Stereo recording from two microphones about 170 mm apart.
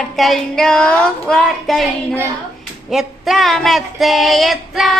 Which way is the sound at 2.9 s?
Centre (ahead or behind).